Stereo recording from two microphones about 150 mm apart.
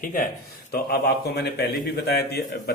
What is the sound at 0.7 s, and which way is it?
A man's voice, 90° left.